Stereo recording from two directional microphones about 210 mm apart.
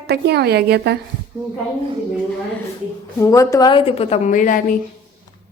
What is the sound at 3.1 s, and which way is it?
A woman's voice, 15° left (ahead or behind).